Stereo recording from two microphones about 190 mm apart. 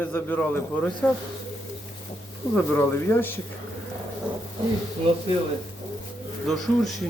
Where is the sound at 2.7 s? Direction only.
10° left (ahead or behind).